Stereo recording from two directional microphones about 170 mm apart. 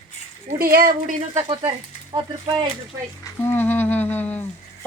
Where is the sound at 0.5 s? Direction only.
60° right (ahead or behind).